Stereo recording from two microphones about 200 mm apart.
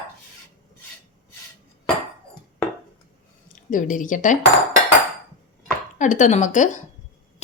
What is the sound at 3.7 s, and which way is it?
Speech, 40° left (ahead or behind).